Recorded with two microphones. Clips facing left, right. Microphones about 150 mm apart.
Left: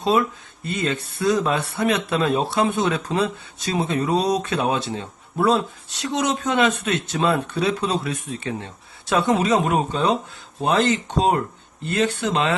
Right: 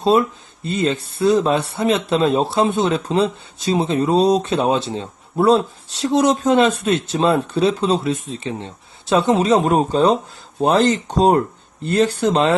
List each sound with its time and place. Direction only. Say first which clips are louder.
0.0 s speech: right 4 dB; 30° right (ahead or behind)